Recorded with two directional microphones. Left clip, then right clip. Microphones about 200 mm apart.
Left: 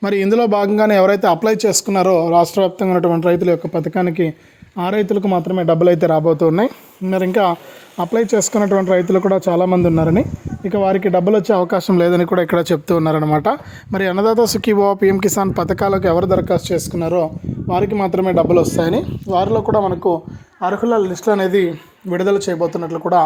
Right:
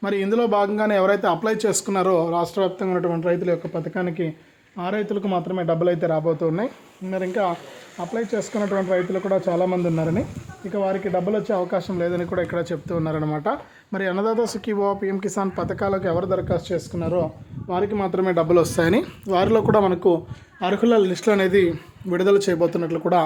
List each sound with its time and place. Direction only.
0.0 s a man's voice: 40° left (ahead or behind); by 23.2 s 5° right (ahead or behind)